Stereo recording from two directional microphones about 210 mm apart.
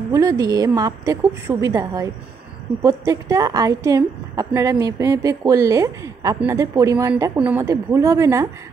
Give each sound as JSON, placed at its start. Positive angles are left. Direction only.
{"t": 0.1, "sound": "a woman's voice", "side_deg": -15}